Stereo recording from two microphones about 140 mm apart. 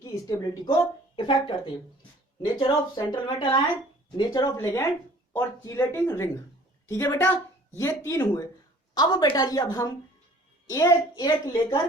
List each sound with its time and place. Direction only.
0.0 s speech: 20° left (ahead or behind)
0.6 s a woman's voice: 35° left (ahead or behind)